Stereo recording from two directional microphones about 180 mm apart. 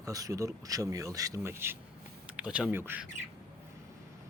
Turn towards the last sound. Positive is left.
turn(degrees=-10)  # may be behind; listen again after turning